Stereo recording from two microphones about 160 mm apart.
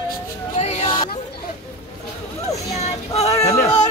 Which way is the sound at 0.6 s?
45° left (ahead or behind).